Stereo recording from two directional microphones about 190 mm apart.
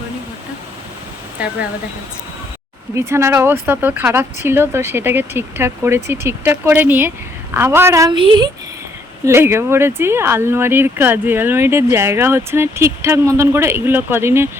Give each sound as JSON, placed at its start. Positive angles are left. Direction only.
{"t": 2.9, "sound": "speech", "side_deg": -15}
{"t": 9.2, "sound": "speech", "side_deg": -15}